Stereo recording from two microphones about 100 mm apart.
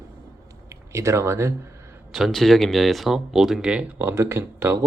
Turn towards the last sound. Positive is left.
turn(degrees=-25)  # may be behind; listen again after turning